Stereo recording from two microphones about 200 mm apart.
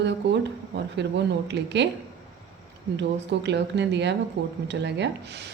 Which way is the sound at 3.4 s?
60° right (ahead or behind).